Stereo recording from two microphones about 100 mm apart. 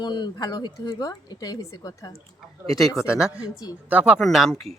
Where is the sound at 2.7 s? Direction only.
Centre (ahead or behind).